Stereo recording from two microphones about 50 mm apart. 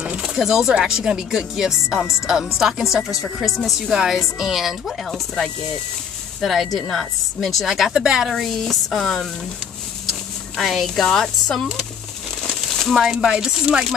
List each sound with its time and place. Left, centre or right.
0.0 s a woman's voice: right; by 7.9 s centre
7.9 s speech: centre
8.3 s a woman's voice: centre
10.6 s a woman's voice: centre
11.0 s speech: centre
12.4 s a sound: centre
12.9 s speech: centre